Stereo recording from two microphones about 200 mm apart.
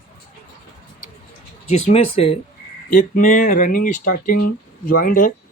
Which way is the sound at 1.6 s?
30° left (ahead or behind).